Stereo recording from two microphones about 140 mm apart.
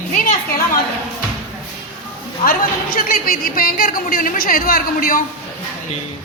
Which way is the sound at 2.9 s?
90° left.